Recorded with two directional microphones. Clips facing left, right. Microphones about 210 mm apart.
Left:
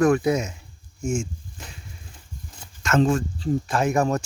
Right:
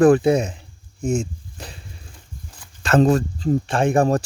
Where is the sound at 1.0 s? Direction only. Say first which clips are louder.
Right 4 dB; 35° right (ahead or behind).